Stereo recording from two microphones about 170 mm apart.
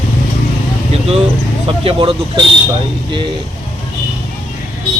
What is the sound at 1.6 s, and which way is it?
Speech, 35° right (ahead or behind).